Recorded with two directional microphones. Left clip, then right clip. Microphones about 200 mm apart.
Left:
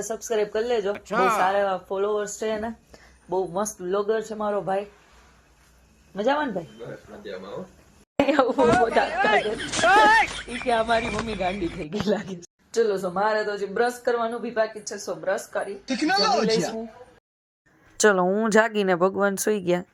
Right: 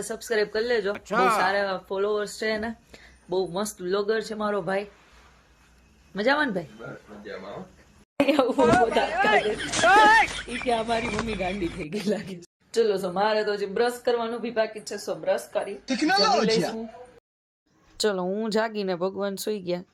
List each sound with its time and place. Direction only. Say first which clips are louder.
0.1 s speech: even; 5° right (ahead or behind)
2.9 s a sound: left 1 dB; 20° right (ahead or behind)
3.5 s speech: left 2 dB; 20° right (ahead or behind)
6.1 s speech: even; 20° right (ahead or behind)
8.3 s speech: left 1 dB; 15° right (ahead or behind)
8.5 s speech: left 1 dB; centre (ahead or behind)
17.9 s speech: left 6 dB; 15° left (ahead or behind)